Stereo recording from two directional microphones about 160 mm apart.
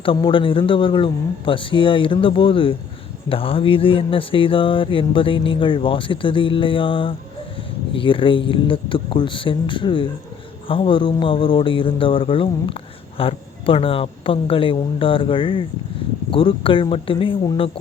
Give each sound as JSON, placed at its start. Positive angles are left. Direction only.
{"t": 0.0, "sound": "speech", "side_deg": 30}